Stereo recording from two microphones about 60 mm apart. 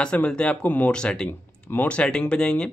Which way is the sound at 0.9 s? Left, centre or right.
Centre.